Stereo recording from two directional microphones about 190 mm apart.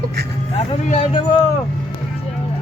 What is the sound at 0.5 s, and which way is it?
Speech, 35° left (ahead or behind).